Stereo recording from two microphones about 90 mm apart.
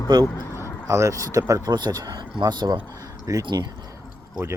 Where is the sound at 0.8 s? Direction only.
35° right (ahead or behind).